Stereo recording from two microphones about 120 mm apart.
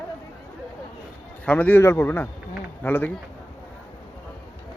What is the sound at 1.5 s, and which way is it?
A man's voice, 15° left (ahead or behind).